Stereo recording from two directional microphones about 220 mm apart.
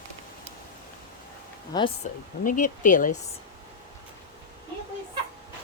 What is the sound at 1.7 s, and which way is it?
Speech, 20° left (ahead or behind).